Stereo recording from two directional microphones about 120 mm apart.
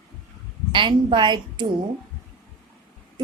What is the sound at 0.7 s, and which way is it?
Speech, 40° right (ahead or behind).